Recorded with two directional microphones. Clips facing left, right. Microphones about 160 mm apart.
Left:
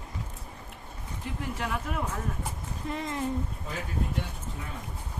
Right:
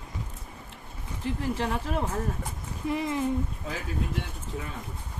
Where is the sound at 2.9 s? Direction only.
10° right (ahead or behind).